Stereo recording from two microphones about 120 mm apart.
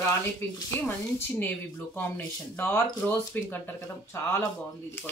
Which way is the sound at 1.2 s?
20° left (ahead or behind).